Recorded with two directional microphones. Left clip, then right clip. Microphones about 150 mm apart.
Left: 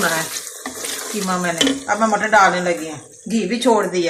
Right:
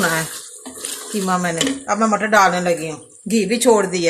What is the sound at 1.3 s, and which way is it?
Speech, 90° right.